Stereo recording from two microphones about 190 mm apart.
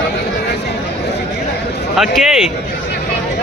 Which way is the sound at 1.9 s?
Centre (ahead or behind).